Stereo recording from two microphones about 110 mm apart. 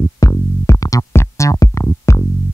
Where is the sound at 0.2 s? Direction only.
30° left (ahead or behind).